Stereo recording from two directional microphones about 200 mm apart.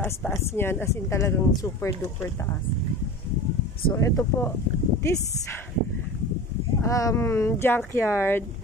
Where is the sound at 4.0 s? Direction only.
10° left (ahead or behind).